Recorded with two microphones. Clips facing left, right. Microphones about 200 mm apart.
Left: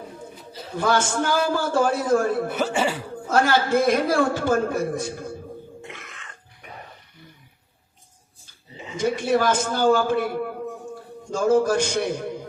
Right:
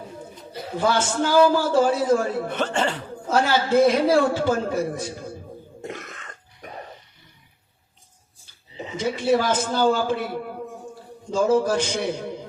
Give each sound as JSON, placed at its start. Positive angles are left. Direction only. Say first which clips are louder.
{"t": 0.8, "sound": "a man's voice", "louder": "even", "side_deg": 50}
{"t": 2.5, "sound": "speech", "louder": "left 1 dB", "side_deg": 10}
{"t": 3.2, "sound": "a man's voice", "louder": "left 1 dB", "side_deg": 55}
{"t": 5.8, "sound": "a sound", "louder": "right 6 dB", "side_deg": -40}
{"t": 9.0, "sound": "a man's voice", "louder": "even", "side_deg": 50}